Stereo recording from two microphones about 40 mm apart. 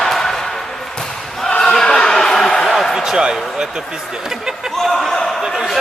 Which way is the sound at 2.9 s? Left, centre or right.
Centre.